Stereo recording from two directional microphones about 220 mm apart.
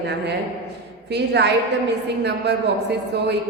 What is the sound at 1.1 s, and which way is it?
Speech, 50° right (ahead or behind).